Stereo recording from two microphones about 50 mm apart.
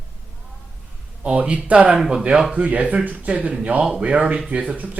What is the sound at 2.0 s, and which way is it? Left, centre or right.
Speech, centre.